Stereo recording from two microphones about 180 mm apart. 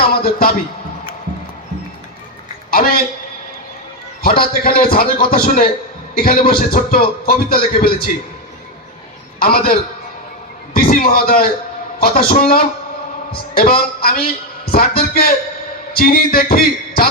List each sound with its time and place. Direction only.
0.1 s a man's voice: 55° left (ahead or behind)
2.6 s a sound: 55° left (ahead or behind)
4.2 s a man's voice: 55° left (ahead or behind)
9.4 s a man's voice: 55° left (ahead or behind)
10.8 s a man's voice: 55° left (ahead or behind)